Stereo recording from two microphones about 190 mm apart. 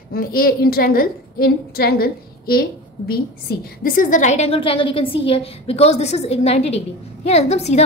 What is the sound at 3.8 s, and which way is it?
A woman's voice, 45° left (ahead or behind).